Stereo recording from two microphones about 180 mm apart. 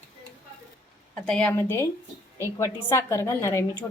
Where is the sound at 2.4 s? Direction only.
15° left (ahead or behind).